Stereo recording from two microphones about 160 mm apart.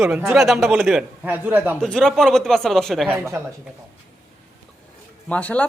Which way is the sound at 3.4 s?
15° right (ahead or behind).